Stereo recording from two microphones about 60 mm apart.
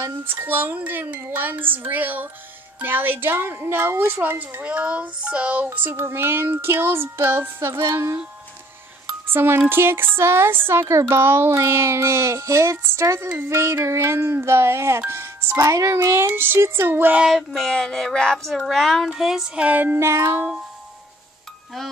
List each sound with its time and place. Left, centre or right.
0.2 s child singing: right
4.2 s speech: right
5.7 s child singing: right
9.3 s child singing: right
10.7 s a woman's voice: right
15.5 s music: right
16.3 s child singing: right
17.3 s a sound: centre
18.5 s a sound: centre
19.0 s music: centre
19.6 s speech: right
20.0 s a woman's voice: right